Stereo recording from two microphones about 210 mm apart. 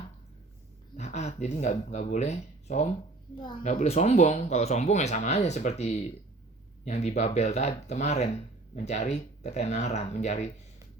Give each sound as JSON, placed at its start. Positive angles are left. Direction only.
{"t": 0.9, "sound": "speech", "side_deg": 35}